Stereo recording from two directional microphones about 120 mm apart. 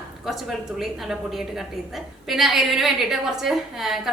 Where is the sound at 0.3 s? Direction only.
Centre (ahead or behind).